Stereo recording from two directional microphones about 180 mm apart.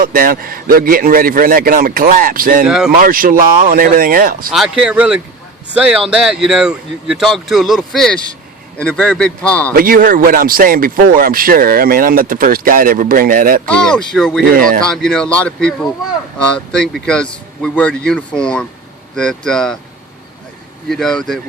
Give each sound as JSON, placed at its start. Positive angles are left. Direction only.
{"t": 0.0, "sound": "speech", "side_deg": -50}
{"t": 2.6, "sound": "speech", "side_deg": -5}
{"t": 3.0, "sound": "speech", "side_deg": -50}
{"t": 4.5, "sound": "a man's voice", "side_deg": -5}
{"t": 9.7, "sound": "speech", "side_deg": -50}
{"t": 13.7, "sound": "speech", "side_deg": 5}
{"t": 14.5, "sound": "speech", "side_deg": -50}
{"t": 14.8, "sound": "speech", "side_deg": 5}
{"t": 20.9, "sound": "speech", "side_deg": 5}